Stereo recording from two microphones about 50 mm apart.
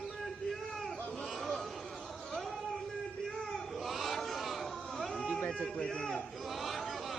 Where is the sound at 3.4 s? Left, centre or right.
Centre.